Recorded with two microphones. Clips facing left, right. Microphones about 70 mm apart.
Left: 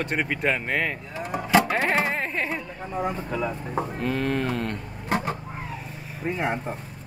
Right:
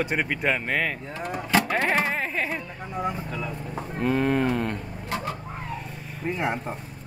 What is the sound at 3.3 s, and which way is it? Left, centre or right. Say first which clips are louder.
Speech: left 5 dB; left.